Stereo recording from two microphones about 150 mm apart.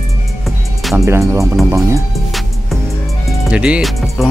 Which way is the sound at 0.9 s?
20° right (ahead or behind).